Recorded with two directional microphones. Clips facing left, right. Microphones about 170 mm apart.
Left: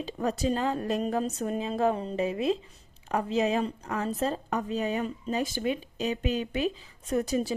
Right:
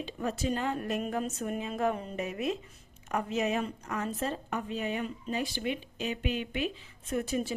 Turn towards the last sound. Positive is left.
turn(degrees=35)  # may be behind; listen again after turning